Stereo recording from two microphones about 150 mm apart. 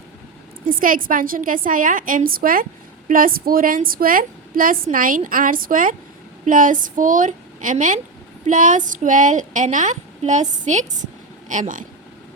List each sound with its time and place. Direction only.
0.6 s a woman's voice: 70° right (ahead or behind)